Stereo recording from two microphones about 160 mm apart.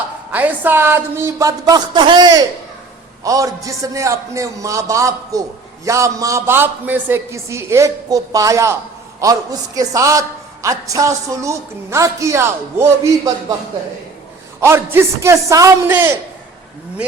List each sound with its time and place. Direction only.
0.3 s a woman's voice: 10° right (ahead or behind)
14.6 s a man's voice: 15° right (ahead or behind)